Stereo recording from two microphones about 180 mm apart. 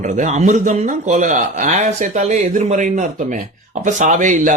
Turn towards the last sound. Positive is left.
turn(degrees=-45)  # may be behind; listen again after turning